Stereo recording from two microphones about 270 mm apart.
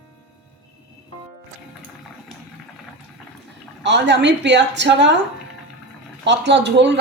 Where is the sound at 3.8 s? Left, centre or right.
Right.